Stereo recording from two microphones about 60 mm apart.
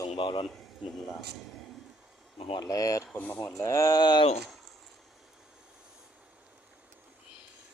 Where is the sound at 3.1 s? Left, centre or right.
Left.